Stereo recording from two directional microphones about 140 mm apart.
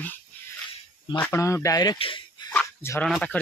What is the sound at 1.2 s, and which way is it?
Speech, 20° left (ahead or behind).